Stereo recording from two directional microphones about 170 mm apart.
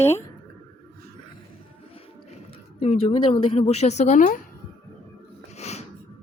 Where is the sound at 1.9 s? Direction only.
35° left (ahead or behind).